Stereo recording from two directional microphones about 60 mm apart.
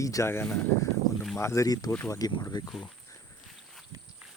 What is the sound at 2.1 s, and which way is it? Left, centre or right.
Speech, left.